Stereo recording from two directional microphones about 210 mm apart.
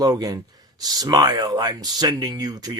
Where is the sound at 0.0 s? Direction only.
15° right (ahead or behind).